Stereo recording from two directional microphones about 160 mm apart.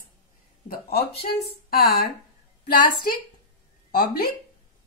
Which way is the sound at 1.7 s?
70° left (ahead or behind).